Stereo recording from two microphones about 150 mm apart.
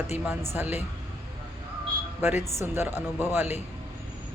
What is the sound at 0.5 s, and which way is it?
Speech, 15° right (ahead or behind).